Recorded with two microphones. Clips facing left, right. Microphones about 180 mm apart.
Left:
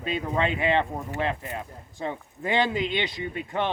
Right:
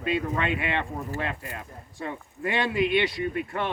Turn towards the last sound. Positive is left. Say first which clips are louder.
# right 3 dB
turn(degrees=20)  # may be behind; listen again after turning